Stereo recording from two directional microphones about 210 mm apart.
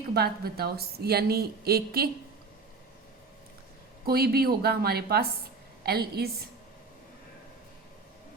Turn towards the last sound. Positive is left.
turn(degrees=-50)  # may be behind; listen again after turning